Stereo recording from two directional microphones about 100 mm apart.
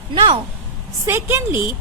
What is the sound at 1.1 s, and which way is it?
Speech, 25° right (ahead or behind).